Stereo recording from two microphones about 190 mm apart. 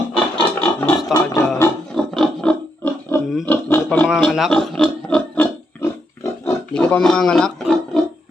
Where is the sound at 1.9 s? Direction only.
Centre (ahead or behind).